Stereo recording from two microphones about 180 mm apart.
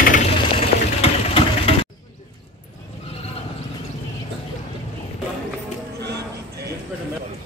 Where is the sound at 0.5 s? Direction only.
35° left (ahead or behind).